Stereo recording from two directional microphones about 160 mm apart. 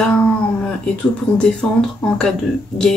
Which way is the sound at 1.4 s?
5° left (ahead or behind).